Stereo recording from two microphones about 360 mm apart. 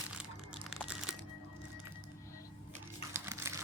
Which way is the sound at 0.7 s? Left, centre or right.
Centre.